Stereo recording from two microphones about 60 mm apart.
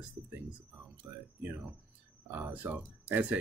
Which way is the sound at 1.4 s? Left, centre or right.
Right.